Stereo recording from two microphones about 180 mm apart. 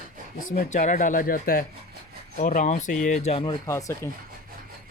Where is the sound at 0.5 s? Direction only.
45° left (ahead or behind).